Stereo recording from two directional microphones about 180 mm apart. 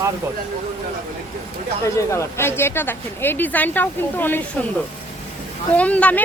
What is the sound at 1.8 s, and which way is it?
Speech, 15° left (ahead or behind).